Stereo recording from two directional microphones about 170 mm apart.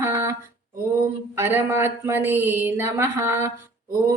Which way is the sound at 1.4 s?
15° right (ahead or behind).